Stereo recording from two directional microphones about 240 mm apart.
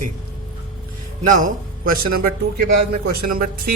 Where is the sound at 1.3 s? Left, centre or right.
Right.